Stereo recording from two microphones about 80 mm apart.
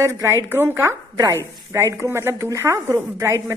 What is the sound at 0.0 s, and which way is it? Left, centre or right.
Speech, right.